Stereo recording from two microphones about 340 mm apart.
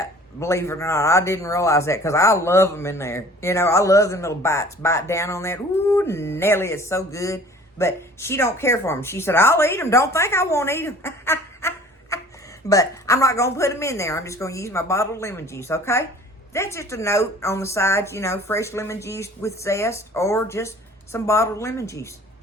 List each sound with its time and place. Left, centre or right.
0.0 s speech: centre
12.1 s a sound: centre
12.6 s speech: centre